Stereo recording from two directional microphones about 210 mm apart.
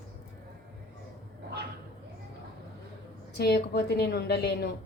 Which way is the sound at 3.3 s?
50° left (ahead or behind).